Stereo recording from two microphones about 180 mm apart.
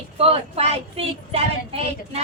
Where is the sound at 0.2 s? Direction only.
35° right (ahead or behind).